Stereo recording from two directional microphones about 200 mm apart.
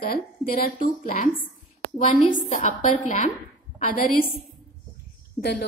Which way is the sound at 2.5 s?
40° left (ahead or behind).